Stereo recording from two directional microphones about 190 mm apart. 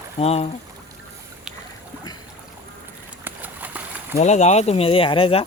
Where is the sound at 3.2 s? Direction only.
10° right (ahead or behind).